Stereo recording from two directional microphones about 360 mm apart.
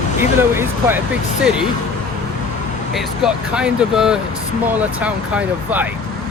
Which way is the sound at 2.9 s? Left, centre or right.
Centre.